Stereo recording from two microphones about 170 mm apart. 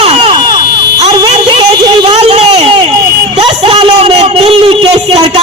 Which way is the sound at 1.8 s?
25° right (ahead or behind).